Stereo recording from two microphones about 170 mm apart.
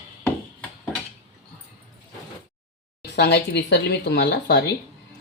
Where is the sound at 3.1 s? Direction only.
75° left (ahead or behind).